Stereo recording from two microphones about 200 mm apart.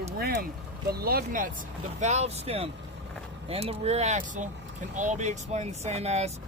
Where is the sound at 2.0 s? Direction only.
35° right (ahead or behind).